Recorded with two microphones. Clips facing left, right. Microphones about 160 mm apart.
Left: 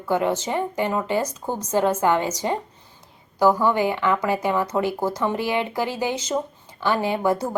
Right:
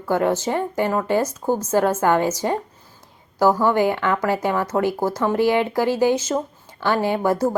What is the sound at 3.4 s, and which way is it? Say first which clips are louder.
Speech: right 1 dB; 15° right (ahead or behind).